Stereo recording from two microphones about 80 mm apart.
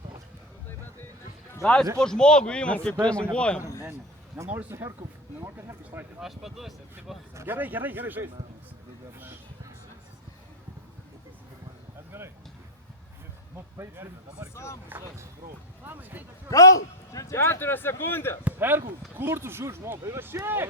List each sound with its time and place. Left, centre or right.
1.6 s speech: centre
3.6 s a sound: left
4.4 s speech: centre
4.7 s speech: right
6.1 s speech: centre
7.4 s speech: right
13.7 s speech: right
14.5 s speech: left
15.8 s speech: right
16.5 s a man's voice: left
17.4 s speech: left
18.4 s speech: right